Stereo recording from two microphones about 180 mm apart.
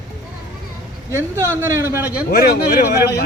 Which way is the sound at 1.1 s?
15° right (ahead or behind).